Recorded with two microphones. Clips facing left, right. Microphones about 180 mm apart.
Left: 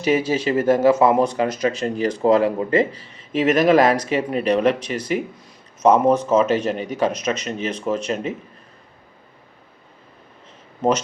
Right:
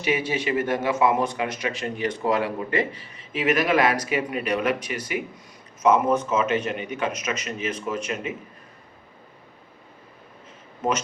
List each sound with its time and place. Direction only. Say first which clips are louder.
0.0 s speech: left 6 dB; 40° left (ahead or behind)